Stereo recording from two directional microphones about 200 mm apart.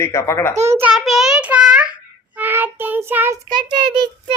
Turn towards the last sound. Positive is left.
turn(degrees=-25)  # may be behind; listen again after turning